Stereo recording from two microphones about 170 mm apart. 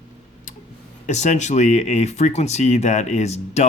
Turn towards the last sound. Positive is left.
turn(degrees=40)  # may be behind; listen again after turning